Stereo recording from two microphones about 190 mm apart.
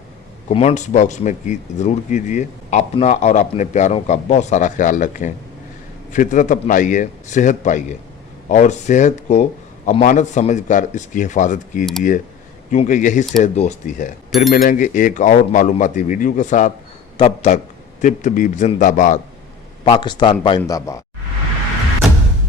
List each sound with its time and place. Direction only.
0.4 s speech: 35° left (ahead or behind)
19.8 s a man's voice: 25° left (ahead or behind)